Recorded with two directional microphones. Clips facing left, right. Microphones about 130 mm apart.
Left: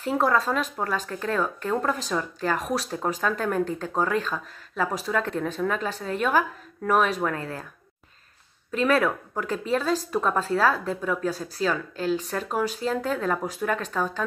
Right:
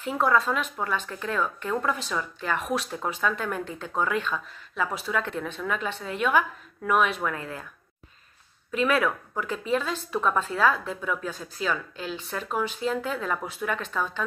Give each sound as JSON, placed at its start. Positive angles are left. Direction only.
{"t": 0.0, "sound": "speech", "side_deg": 35}
{"t": 8.7, "sound": "speech", "side_deg": 40}